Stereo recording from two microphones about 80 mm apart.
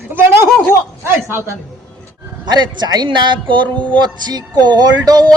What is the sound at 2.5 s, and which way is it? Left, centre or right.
Music, right.